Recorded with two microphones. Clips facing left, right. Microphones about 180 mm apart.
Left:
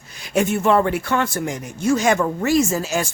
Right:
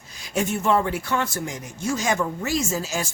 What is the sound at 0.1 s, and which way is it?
Speech, 65° left (ahead or behind).